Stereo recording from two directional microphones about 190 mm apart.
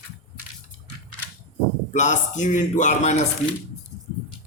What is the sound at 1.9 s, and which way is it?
A man's voice, 40° left (ahead or behind).